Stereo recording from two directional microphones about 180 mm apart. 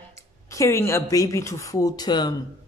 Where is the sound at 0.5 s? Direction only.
15° left (ahead or behind).